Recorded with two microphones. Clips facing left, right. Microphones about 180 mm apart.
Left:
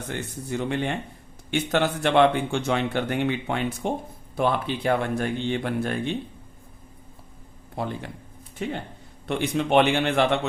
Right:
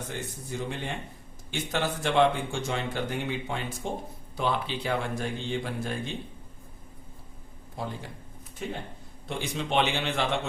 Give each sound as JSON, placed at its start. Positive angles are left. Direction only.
{"t": 0.1, "sound": "a man's voice", "side_deg": 65}
{"t": 4.4, "sound": "a man's voice", "side_deg": 55}
{"t": 7.8, "sound": "a man's voice", "side_deg": 65}
{"t": 9.2, "sound": "a man's voice", "side_deg": 60}